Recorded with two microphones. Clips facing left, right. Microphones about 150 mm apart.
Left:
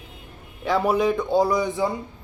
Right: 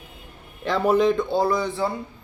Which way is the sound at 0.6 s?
10° left (ahead or behind).